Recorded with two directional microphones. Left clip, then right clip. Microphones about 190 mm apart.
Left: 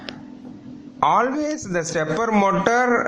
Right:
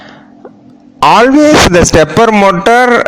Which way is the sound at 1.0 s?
40° right (ahead or behind).